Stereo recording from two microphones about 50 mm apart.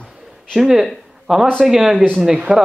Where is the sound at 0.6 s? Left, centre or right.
Centre.